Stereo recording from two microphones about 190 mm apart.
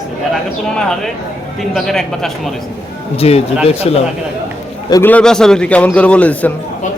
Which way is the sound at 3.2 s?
30° left (ahead or behind).